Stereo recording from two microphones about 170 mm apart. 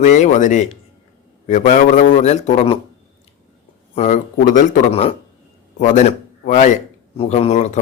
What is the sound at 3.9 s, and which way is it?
Speech, 45° left (ahead or behind).